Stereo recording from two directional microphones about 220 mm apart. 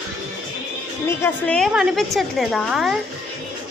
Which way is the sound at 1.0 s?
10° left (ahead or behind).